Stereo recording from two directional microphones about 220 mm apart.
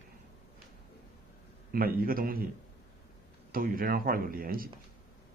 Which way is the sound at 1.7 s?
40° right (ahead or behind).